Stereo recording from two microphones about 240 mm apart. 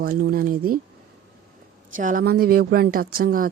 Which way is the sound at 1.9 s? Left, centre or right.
Right.